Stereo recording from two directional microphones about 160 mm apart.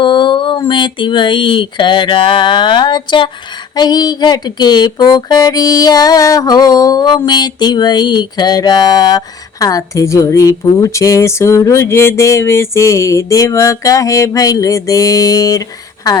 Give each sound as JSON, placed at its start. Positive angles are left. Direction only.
{"t": 0.0, "sound": "speech", "side_deg": 30}
{"t": 3.8, "sound": "music", "side_deg": 25}